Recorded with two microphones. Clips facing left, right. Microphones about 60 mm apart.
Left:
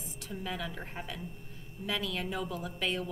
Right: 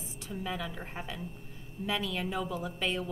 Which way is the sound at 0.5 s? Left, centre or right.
Centre.